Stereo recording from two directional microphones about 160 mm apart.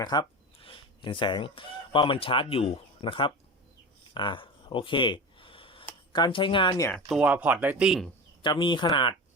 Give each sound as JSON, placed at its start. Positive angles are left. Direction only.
{"t": 0.0, "sound": "fowl", "side_deg": 25}
{"t": 4.1, "sound": "a sound", "side_deg": 30}
{"t": 6.1, "sound": "speech", "side_deg": 30}
{"t": 6.9, "sound": "speech", "side_deg": -5}
{"t": 8.4, "sound": "speech", "side_deg": 30}